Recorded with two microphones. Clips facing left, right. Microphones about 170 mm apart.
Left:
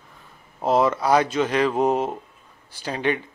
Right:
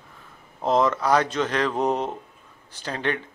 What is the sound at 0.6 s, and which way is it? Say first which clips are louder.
A man's voice: left 1 dB; 10° left (ahead or behind).